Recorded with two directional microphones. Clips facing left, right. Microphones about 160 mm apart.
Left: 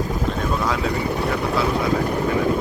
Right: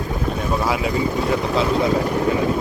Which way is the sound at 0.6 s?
10° right (ahead or behind).